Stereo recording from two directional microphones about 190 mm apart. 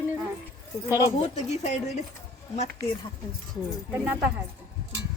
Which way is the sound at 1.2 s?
35° left (ahead or behind).